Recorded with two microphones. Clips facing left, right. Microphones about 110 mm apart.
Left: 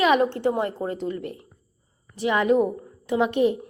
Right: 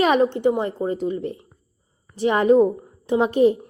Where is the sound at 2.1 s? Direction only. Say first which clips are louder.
Right 4 dB; 35° right (ahead or behind).